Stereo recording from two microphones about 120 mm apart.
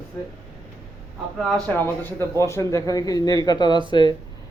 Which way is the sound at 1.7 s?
20° left (ahead or behind).